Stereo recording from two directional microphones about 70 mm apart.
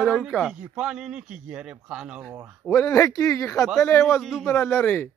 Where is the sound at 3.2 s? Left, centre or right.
Left.